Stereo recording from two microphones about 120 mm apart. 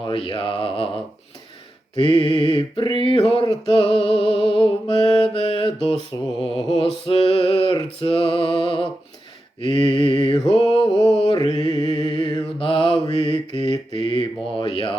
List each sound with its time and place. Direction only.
0.0 s mantra: 45° left (ahead or behind)
2.0 s mantra: 45° left (ahead or behind)